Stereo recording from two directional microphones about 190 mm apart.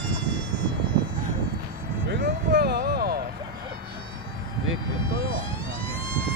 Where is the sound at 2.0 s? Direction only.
60° right (ahead or behind).